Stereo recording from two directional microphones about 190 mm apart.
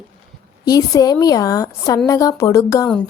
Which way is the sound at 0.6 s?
20° left (ahead or behind).